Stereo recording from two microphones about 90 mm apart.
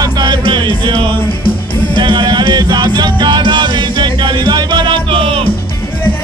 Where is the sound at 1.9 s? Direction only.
60° right (ahead or behind); by 5.4 s 85° right.